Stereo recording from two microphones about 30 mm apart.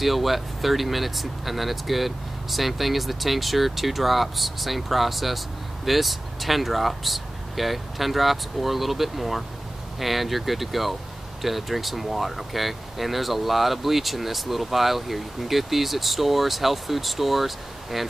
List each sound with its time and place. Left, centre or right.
0.0 s speech: centre